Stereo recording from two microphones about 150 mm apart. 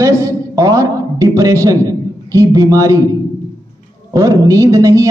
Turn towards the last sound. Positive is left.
turn(degrees=-20)  # may be behind; listen again after turning